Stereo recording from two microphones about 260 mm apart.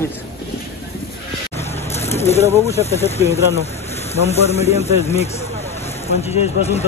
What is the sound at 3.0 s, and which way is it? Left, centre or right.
Speech, left.